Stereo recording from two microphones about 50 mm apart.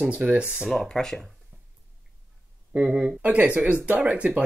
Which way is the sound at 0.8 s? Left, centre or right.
Centre.